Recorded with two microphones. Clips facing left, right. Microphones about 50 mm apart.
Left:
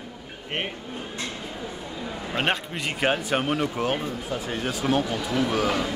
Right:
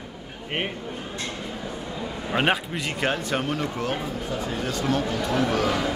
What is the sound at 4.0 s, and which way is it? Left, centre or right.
Speech, centre.